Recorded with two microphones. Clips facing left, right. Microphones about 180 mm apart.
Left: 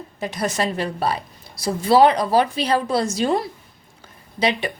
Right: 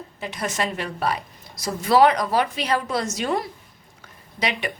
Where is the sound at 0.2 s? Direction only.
40° left (ahead or behind).